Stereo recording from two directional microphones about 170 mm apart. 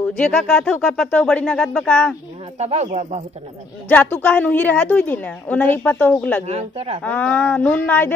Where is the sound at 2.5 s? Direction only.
40° right (ahead or behind).